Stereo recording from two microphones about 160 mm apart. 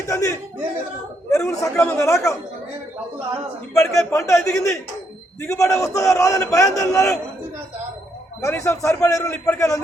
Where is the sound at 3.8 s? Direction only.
20° left (ahead or behind).